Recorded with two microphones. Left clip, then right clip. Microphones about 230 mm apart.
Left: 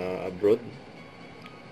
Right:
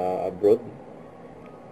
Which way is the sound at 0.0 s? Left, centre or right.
Left.